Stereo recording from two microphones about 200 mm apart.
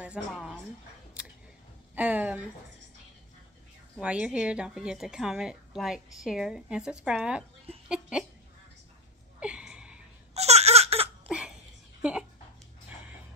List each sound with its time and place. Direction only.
0.0 s a woman's voice: 5° right (ahead or behind)
2.0 s a woman's voice: 10° right (ahead or behind)
4.0 s a woman's voice: 5° right (ahead or behind)
9.4 s a sound: 5° right (ahead or behind)
10.3 s baby cry: 30° right (ahead or behind)
11.2 s a sound: 5° right (ahead or behind)